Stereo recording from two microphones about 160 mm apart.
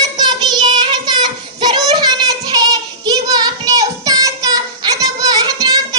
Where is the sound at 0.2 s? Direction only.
25° right (ahead or behind).